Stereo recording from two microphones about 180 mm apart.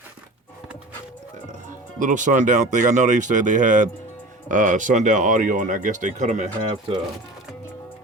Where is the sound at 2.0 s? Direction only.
45° right (ahead or behind).